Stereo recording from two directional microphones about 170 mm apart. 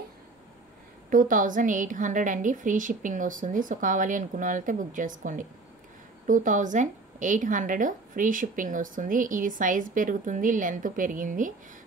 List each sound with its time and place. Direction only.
1.1 s a woman's voice: 50° right (ahead or behind)